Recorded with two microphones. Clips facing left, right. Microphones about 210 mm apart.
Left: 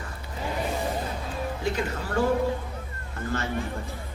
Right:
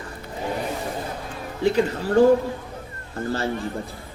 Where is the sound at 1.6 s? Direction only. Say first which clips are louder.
Right 11 dB; 35° right (ahead or behind).